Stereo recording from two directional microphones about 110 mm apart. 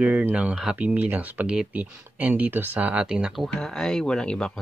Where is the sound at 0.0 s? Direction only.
10° right (ahead or behind).